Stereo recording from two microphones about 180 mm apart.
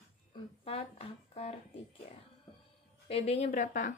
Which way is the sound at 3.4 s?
45° left (ahead or behind).